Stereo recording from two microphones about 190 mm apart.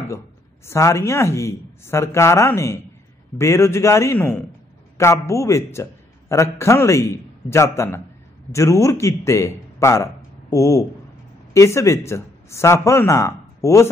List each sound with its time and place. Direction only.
0.7 s a man's voice: 15° left (ahead or behind)